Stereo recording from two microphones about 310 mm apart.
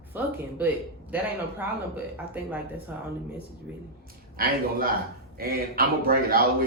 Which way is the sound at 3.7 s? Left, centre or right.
Centre.